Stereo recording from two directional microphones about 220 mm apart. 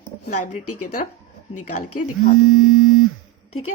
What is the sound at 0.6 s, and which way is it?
Speech, 90° left.